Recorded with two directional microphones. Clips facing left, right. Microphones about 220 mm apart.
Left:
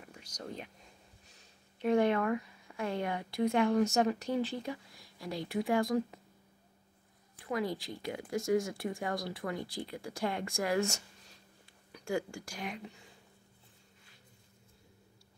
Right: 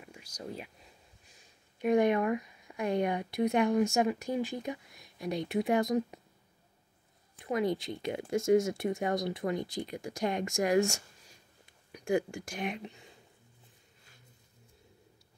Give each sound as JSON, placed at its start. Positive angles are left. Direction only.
{"t": 0.0, "sound": "whispering", "side_deg": -10}
{"t": 1.8, "sound": "speech", "side_deg": -15}
{"t": 7.3, "sound": "speech", "side_deg": -20}